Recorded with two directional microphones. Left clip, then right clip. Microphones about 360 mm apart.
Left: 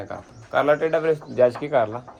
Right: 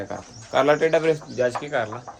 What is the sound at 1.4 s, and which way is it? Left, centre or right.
Speech, centre.